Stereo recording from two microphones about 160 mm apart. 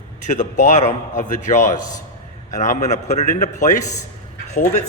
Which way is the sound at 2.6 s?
50° left (ahead or behind).